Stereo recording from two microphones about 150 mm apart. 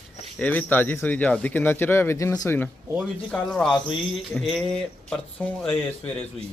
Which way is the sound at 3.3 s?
5° left (ahead or behind).